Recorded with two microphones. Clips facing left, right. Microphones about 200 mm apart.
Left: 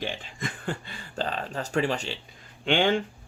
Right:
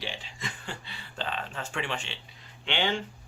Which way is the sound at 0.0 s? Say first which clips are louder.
Left 5 dB; 50° left (ahead or behind).